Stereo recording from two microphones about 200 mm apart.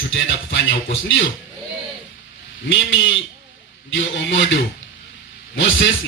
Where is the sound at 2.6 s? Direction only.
70° left (ahead or behind).